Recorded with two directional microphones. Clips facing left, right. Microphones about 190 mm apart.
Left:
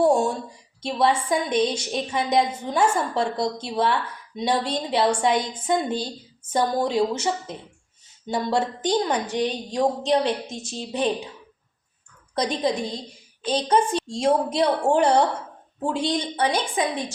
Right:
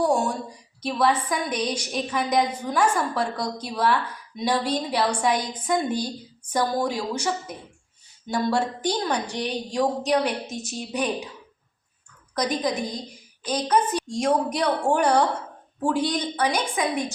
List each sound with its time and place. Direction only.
0.0 s a sound: 25° left (ahead or behind)
0.8 s a woman's voice: 25° left (ahead or behind)
12.3 s a woman's voice: 30° left (ahead or behind)